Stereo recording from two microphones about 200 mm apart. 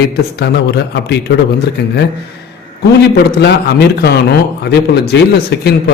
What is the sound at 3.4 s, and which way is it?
Speech, 55° left (ahead or behind).